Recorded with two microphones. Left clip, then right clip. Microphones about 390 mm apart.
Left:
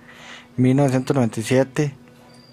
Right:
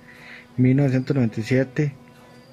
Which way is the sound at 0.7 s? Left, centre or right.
Left.